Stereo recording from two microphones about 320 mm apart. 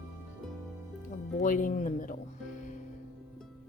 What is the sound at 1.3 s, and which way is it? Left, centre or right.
Speech, left.